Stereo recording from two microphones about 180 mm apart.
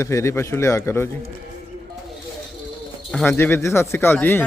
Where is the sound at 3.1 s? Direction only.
10° left (ahead or behind).